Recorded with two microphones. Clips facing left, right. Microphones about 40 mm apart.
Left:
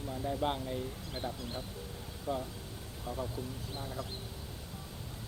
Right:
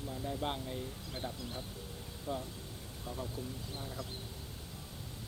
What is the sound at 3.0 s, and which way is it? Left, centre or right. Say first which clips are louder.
Speech: left 4 dB; centre.